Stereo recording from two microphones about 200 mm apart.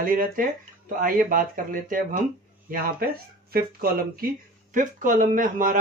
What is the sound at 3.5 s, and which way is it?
Speech, 50° right (ahead or behind).